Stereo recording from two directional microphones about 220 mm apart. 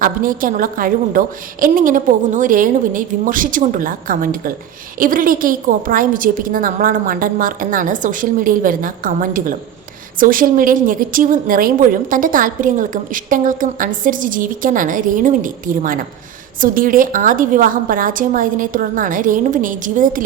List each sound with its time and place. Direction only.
0.0 s a woman's voice: 40° right (ahead or behind)